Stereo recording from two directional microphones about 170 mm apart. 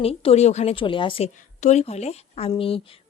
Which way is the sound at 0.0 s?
35° left (ahead or behind).